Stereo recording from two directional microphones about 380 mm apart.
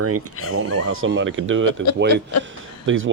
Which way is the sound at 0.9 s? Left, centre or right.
Right.